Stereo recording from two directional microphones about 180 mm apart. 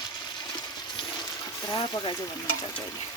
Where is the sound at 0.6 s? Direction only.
25° left (ahead or behind).